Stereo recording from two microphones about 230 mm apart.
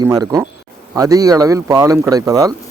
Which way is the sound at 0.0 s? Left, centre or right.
Centre.